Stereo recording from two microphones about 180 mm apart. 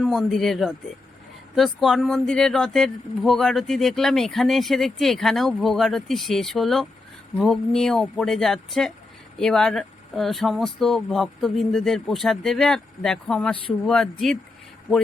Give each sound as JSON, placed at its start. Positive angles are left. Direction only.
{"t": 0.0, "sound": "speech", "side_deg": 0}